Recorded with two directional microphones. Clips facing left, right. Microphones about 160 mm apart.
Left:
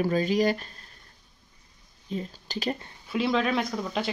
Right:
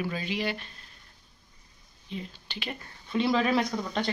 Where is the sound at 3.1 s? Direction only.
Centre (ahead or behind).